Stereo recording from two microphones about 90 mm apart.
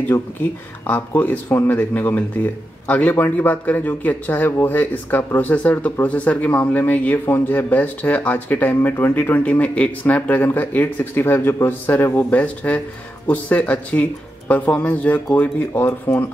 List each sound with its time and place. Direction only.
0.8 s speech: 20° left (ahead or behind)